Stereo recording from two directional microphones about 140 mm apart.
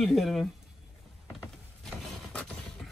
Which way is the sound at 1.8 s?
5° left (ahead or behind).